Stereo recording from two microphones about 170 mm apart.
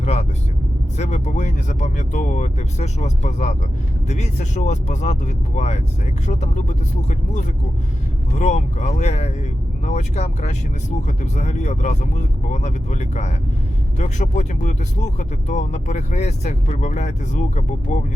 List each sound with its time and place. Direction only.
0.0 s speech: 40° left (ahead or behind)